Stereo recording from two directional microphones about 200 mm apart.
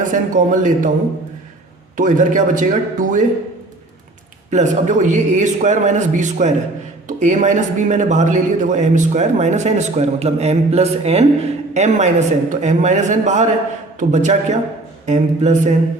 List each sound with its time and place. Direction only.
0.0 s a man's voice: 40° right (ahead or behind)
2.0 s a man's voice: 40° right (ahead or behind)
4.5 s a man's voice: 35° right (ahead or behind)